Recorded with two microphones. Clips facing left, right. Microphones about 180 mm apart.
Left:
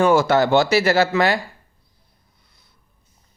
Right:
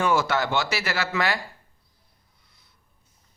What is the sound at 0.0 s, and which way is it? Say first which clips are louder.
Speech: left 8 dB; 30° left (ahead or behind).